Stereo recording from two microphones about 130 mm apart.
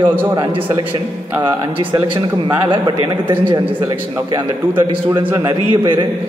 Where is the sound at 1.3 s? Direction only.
35° right (ahead or behind).